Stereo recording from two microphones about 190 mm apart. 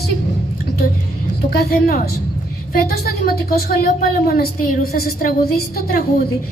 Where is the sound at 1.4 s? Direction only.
50° left (ahead or behind).